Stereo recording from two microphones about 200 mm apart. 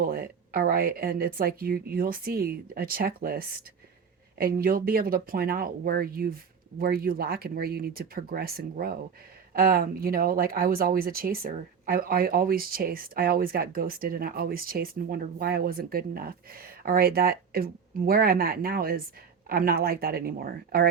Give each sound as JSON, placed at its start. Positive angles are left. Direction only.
{"t": 0.0, "sound": "speech", "side_deg": -45}